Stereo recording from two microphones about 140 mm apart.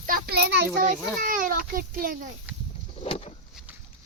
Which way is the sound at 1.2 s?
80° right.